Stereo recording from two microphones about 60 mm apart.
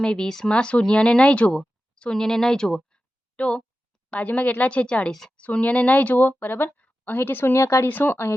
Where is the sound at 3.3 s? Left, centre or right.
Centre; by 7.8 s left.